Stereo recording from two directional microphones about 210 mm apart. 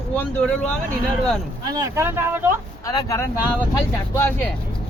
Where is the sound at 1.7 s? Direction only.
15° right (ahead or behind).